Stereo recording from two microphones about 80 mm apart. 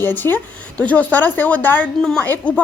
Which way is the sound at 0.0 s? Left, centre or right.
Left.